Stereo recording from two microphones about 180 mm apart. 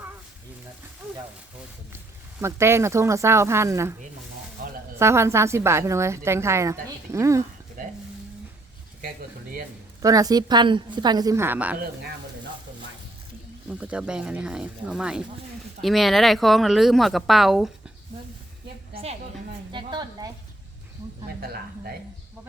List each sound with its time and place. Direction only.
2.4 s a woman's voice: 15° right (ahead or behind)
4.9 s a woman's voice: 15° right (ahead or behind)
10.0 s a woman's voice: 20° right (ahead or behind)
13.7 s speech: 5° right (ahead or behind)
19.7 s a sound: 25° right (ahead or behind)
21.4 s speech: 55° right (ahead or behind)